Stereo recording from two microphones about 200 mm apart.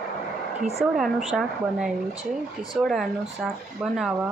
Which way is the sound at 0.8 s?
Centre (ahead or behind).